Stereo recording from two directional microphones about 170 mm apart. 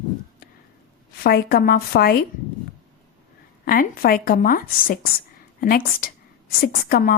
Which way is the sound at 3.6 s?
55° left (ahead or behind).